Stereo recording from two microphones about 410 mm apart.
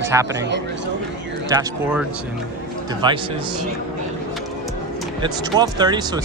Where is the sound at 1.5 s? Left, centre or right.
Centre.